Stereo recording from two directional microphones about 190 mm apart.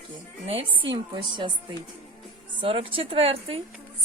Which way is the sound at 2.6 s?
30° right (ahead or behind).